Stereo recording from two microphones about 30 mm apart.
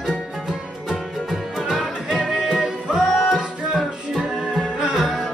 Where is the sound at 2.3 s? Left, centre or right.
Right.